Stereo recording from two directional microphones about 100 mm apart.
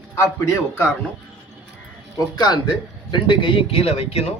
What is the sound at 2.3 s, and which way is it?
Speech, 45° left (ahead or behind).